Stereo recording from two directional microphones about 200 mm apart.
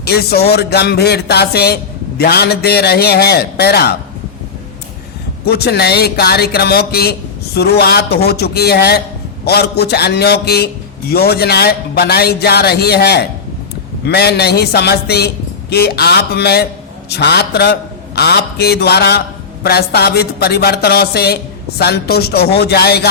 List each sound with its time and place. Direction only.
0.0 s a man's voice: 50° left (ahead or behind)
5.5 s a man's voice: 55° left (ahead or behind)